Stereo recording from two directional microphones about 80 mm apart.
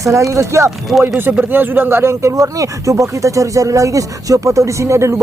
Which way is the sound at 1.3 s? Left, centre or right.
Right.